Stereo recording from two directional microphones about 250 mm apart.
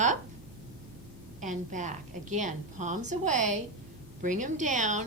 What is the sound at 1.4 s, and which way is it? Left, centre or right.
A woman's voice, right.